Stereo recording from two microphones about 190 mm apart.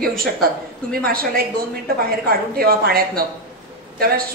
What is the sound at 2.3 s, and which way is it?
A woman's voice, 55° right (ahead or behind).